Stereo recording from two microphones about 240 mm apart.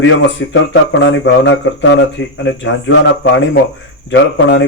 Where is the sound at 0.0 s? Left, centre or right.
Left.